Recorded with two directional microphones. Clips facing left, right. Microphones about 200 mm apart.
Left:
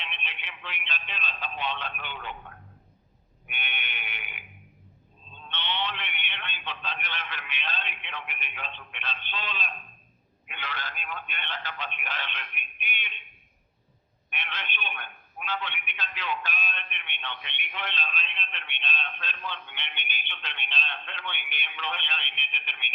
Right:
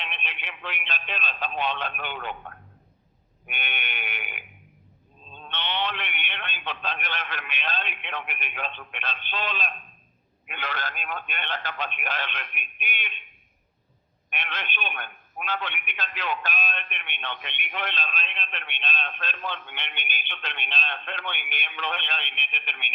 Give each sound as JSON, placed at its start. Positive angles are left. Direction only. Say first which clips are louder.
{"t": 0.1, "sound": "speech", "louder": "right 4 dB", "side_deg": -65}
{"t": 0.4, "sound": "a man's voice", "louder": "right 7 dB", "side_deg": -45}
{"t": 3.4, "sound": "a man's voice", "louder": "right 4 dB", "side_deg": -50}
{"t": 5.5, "sound": "a man's voice", "louder": "right 3 dB", "side_deg": -45}
{"t": 14.3, "sound": "speech", "louder": "right 4 dB", "side_deg": -45}
{"t": 14.8, "sound": "a man's voice", "louder": "right 4 dB", "side_deg": -60}